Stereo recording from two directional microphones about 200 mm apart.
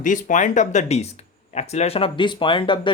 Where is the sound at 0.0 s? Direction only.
40° left (ahead or behind).